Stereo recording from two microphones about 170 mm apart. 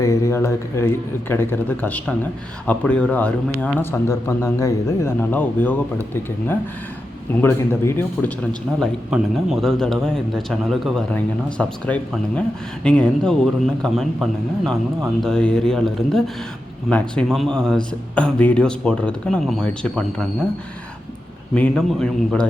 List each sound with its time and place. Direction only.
0.0 s speech: 15° left (ahead or behind)
7.4 s speech: 15° left (ahead or behind)
8.8 s speech: centre (ahead or behind)
21.5 s speech: 5° left (ahead or behind)